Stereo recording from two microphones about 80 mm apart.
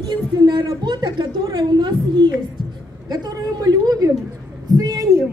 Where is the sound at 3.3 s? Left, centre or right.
Right.